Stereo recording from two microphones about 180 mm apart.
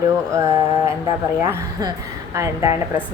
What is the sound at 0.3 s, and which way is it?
Music, 15° right (ahead or behind).